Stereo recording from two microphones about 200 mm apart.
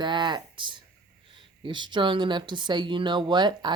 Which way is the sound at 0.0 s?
25° right (ahead or behind).